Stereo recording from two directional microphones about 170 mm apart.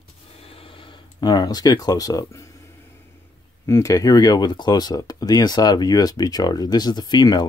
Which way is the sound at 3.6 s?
15° left (ahead or behind).